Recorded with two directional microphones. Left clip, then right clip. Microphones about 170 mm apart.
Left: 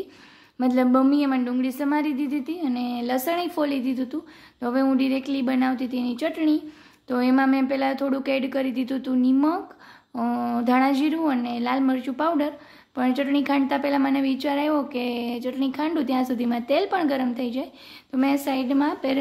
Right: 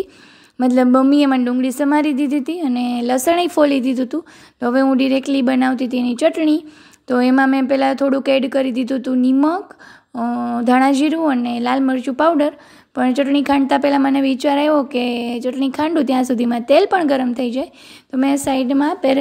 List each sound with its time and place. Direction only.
0.6 s a woman's voice: 40° right (ahead or behind)
10.1 s a sound: 20° right (ahead or behind)
10.6 s speech: 40° right (ahead or behind)